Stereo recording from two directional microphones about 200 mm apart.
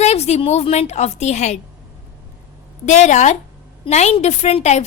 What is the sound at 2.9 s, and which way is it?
A woman's voice, 35° left (ahead or behind).